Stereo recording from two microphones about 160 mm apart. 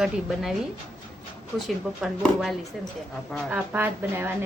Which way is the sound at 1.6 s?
Centre (ahead or behind).